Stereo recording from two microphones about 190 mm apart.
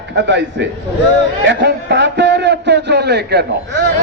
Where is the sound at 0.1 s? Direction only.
70° right (ahead or behind).